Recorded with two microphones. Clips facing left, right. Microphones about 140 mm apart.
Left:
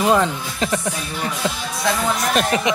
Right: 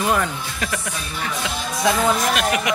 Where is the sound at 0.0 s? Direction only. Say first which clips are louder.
Left 4 dB; 20° left (ahead or behind).